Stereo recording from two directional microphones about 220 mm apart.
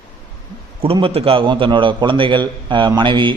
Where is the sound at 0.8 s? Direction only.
25° right (ahead or behind).